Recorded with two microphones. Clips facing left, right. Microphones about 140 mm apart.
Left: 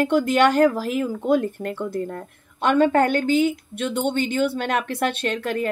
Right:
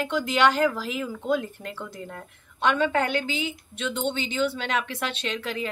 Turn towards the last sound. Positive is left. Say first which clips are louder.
# left 6 dB
turn(degrees=50)  # may be behind; listen again after turning